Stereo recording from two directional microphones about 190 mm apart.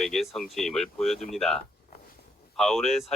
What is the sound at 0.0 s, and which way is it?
Speech, centre (ahead or behind).